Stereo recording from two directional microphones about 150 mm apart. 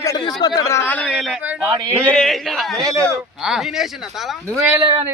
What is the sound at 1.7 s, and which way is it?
Speech, 30° right (ahead or behind).